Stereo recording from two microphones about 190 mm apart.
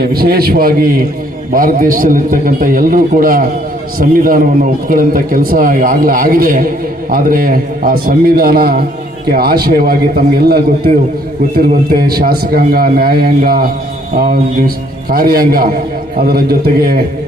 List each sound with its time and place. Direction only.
0.0 s a man's voice: 55° right (ahead or behind)
15.1 s a man's voice: 50° right (ahead or behind)